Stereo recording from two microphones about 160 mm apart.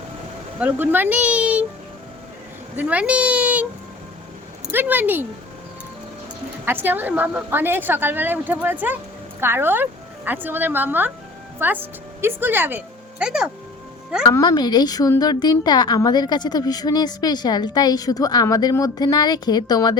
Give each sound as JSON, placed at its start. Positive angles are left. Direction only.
{"t": 0.6, "sound": "a woman's voice", "side_deg": -10}
{"t": 2.7, "sound": "a woman's voice", "side_deg": -10}
{"t": 4.7, "sound": "a woman's voice", "side_deg": -10}
{"t": 6.7, "sound": "a woman's voice", "side_deg": -10}
{"t": 14.3, "sound": "speech", "side_deg": 25}